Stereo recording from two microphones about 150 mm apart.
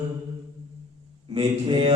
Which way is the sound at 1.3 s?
35° right (ahead or behind).